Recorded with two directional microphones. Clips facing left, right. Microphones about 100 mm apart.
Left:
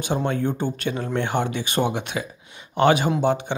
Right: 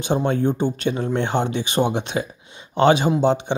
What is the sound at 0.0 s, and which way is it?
Speech, 25° right (ahead or behind).